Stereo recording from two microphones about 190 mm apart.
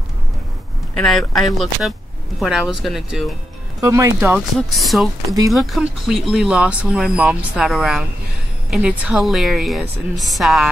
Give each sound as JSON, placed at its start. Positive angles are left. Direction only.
{"t": 0.9, "sound": "speech", "side_deg": 0}
{"t": 3.8, "sound": "speech", "side_deg": -15}
{"t": 4.6, "sound": "speech", "side_deg": 0}